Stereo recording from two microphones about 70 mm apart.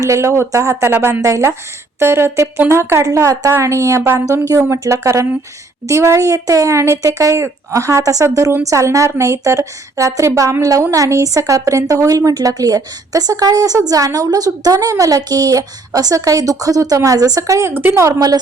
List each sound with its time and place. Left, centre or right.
0.0 s a woman's voice: right
0.8 s speech: right
1.2 s a woman's voice: right
4.7 s a woman's voice: right